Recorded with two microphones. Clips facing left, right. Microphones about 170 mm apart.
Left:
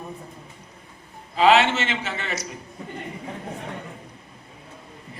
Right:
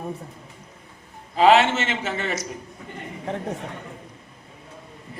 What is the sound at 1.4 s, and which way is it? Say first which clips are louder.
A man's voice: right 1 dB; 45° right (ahead or behind).